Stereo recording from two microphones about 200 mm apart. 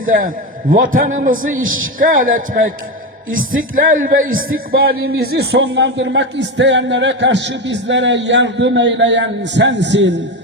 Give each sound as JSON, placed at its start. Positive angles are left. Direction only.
{"t": 0.0, "sound": "a man's voice", "side_deg": -45}
{"t": 1.6, "sound": "speech", "side_deg": -80}
{"t": 2.0, "sound": "a man's voice", "side_deg": -45}